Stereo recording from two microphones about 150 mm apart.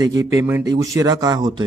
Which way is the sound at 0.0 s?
25° right (ahead or behind).